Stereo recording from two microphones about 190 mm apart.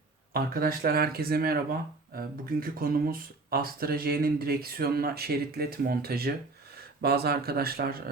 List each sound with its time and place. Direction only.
0.3 s speech: 50° right (ahead or behind)